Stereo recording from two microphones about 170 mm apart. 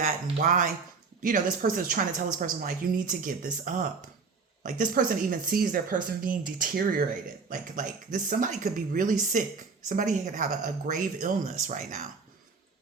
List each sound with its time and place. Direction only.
0.0 s speech: 50° right (ahead or behind)